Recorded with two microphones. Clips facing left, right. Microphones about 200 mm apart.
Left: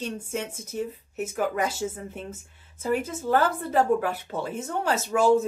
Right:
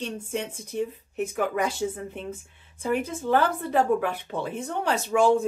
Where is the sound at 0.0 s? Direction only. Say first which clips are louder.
Even; 5° left (ahead or behind).